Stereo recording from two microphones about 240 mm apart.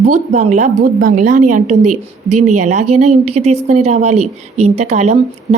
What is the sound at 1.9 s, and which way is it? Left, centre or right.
Speech, right.